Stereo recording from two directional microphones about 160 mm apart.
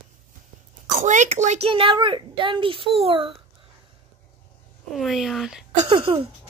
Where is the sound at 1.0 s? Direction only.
50° right (ahead or behind).